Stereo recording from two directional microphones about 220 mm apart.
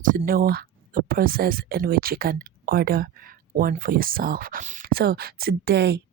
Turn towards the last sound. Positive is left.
turn(degrees=-50)  # may be behind; listen again after turning